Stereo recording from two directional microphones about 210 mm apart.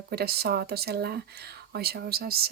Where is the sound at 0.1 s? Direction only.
50° right (ahead or behind).